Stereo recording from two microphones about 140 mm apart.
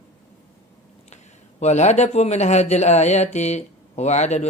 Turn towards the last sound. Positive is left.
turn(degrees=55)  # may be behind; listen again after turning